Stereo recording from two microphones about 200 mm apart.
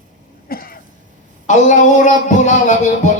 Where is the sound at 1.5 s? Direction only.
40° left (ahead or behind).